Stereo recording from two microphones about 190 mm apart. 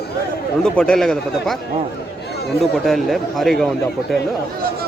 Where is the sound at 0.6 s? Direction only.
5° left (ahead or behind).